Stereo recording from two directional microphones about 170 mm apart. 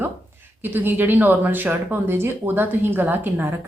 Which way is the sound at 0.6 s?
10° right (ahead or behind).